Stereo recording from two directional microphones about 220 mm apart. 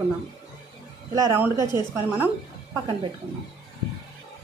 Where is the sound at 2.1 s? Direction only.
10° right (ahead or behind).